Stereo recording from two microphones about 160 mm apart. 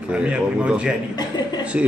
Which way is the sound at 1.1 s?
25° left (ahead or behind).